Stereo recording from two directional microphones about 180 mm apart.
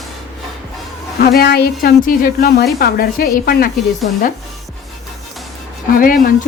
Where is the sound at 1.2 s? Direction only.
60° left (ahead or behind).